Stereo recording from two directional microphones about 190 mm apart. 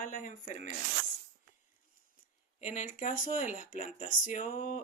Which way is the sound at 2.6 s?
40° left (ahead or behind).